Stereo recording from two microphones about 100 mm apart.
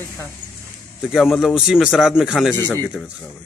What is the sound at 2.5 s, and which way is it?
Speech, 20° left (ahead or behind).